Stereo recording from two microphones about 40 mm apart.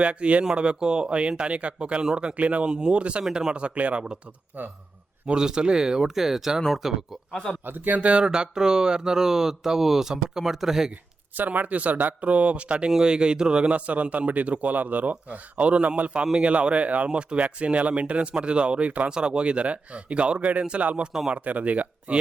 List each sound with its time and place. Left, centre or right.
0.0 s a man's voice: right
3.2 s speech: centre
3.5 s speech: right
5.3 s speech: right
7.6 s speech: right
8.2 s speech: centre
11.3 s a man's voice: right
17.1 s a man's voice: right